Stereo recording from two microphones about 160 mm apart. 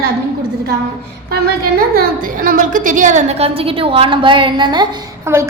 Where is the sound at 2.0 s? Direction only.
60° right (ahead or behind).